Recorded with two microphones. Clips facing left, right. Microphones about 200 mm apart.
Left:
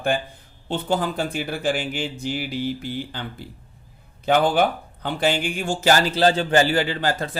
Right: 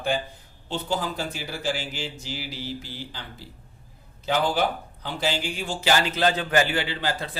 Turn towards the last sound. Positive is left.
turn(degrees=45)  # may be behind; listen again after turning